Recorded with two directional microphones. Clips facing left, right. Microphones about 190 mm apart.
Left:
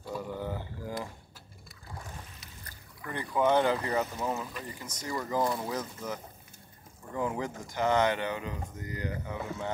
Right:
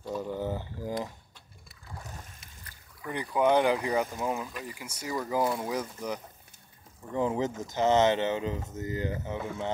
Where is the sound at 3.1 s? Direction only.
15° right (ahead or behind).